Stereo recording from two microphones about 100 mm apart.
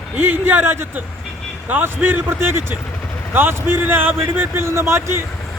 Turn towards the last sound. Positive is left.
turn(degrees=-25)  # may be behind; listen again after turning